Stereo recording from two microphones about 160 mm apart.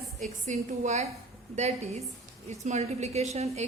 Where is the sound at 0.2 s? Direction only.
45° right (ahead or behind).